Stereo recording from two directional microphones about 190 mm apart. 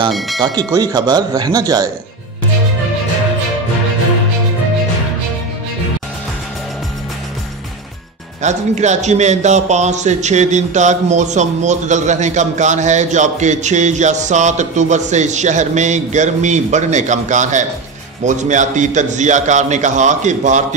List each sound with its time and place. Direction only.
0.4 s speech: 20° right (ahead or behind)
8.4 s a man's voice: 40° right (ahead or behind)